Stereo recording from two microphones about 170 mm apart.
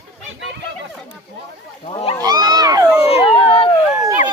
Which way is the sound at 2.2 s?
25° right (ahead or behind).